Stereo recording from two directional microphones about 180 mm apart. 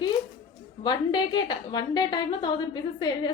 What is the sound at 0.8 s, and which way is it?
A woman's voice, 25° left (ahead or behind).